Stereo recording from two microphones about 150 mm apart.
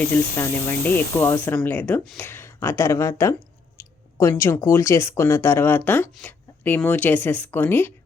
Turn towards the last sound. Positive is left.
turn(degrees=15)  # may be behind; listen again after turning